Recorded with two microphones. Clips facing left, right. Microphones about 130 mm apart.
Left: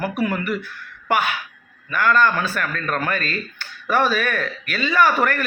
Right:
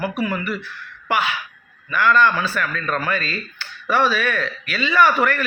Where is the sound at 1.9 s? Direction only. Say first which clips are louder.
Right 1 dB; 45° left (ahead or behind).